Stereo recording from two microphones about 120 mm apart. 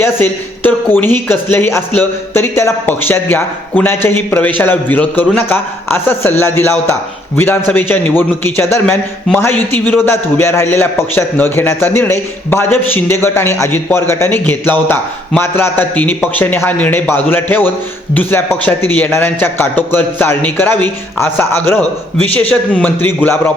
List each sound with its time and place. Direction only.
0.0 s a man's voice: 15° left (ahead or behind)